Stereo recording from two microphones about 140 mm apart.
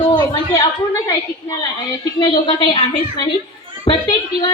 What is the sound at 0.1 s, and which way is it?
A woman's voice, 30° left (ahead or behind).